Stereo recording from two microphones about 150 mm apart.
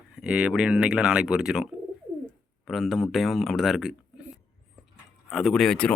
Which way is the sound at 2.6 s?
Centre (ahead or behind).